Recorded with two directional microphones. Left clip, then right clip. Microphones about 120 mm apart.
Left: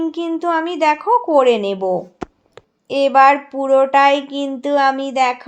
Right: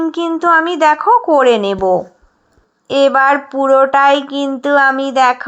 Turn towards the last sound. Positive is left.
turn(degrees=-15)  # may be behind; listen again after turning